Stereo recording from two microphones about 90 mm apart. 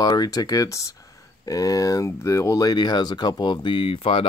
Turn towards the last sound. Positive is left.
turn(degrees=85)